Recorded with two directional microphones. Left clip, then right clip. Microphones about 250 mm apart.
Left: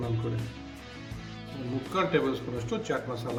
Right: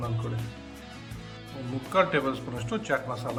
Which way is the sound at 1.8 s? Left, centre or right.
Centre.